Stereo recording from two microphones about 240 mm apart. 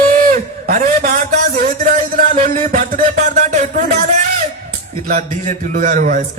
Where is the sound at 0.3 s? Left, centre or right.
Right.